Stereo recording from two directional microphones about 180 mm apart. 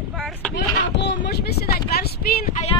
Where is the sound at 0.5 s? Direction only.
75° left (ahead or behind); by 2.5 s 60° left (ahead or behind).